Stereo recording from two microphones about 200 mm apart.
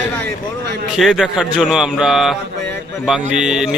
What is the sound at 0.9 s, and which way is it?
Speech, centre (ahead or behind).